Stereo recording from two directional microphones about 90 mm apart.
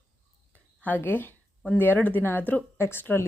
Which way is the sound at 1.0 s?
20° left (ahead or behind).